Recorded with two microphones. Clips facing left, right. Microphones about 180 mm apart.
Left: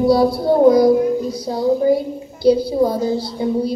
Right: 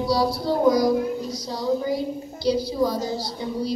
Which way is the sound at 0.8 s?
55° left (ahead or behind).